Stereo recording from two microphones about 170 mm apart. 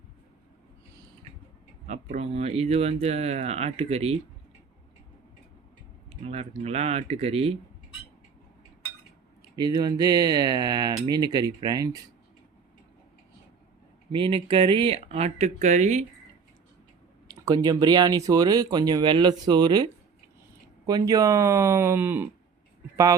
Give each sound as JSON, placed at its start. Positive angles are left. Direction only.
{"t": 1.9, "sound": "speech", "side_deg": -40}
{"t": 6.1, "sound": "speech", "side_deg": -35}
{"t": 9.6, "sound": "speech", "side_deg": -25}
{"t": 14.1, "sound": "speech", "side_deg": -30}
{"t": 17.3, "sound": "speech", "side_deg": -20}